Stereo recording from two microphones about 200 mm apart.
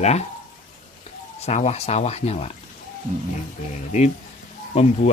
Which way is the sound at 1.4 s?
30° left (ahead or behind).